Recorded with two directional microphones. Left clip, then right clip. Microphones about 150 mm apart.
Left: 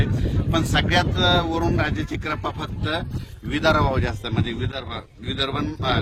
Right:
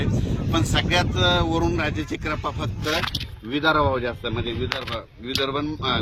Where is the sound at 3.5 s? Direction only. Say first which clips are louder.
Even; 30° left (ahead or behind).